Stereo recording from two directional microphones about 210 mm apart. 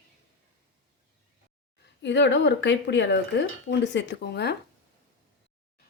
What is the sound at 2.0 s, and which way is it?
Speech, 60° left (ahead or behind).